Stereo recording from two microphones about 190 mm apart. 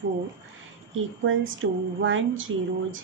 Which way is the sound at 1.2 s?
90° right.